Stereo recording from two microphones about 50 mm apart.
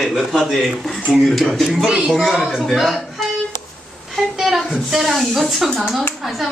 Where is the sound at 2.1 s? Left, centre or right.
Centre.